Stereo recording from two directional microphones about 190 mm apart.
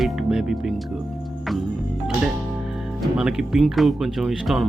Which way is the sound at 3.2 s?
5° right (ahead or behind).